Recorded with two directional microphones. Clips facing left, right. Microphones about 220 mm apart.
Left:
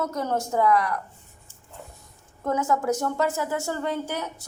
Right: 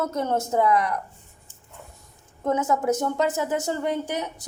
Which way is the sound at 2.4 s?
20° right (ahead or behind).